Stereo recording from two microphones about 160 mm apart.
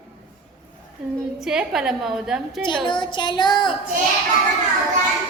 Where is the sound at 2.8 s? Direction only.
30° left (ahead or behind).